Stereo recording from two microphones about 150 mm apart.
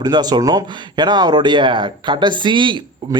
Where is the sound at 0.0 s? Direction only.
25° right (ahead or behind).